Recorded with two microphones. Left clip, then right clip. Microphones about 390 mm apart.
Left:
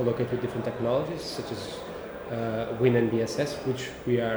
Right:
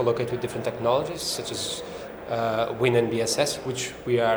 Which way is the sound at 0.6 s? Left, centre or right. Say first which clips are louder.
Right 5 dB; right.